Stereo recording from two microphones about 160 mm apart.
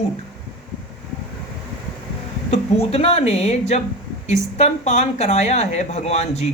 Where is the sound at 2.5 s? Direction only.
40° left (ahead or behind).